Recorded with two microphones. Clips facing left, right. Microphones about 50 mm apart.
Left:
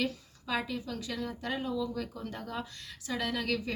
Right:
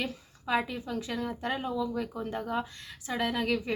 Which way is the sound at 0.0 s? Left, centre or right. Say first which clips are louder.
Left 1 dB; right.